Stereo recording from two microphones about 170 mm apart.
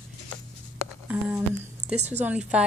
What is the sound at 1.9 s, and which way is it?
Speech, 40° right (ahead or behind).